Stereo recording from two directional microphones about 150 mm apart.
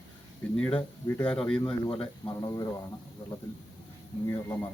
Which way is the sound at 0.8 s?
10° left (ahead or behind).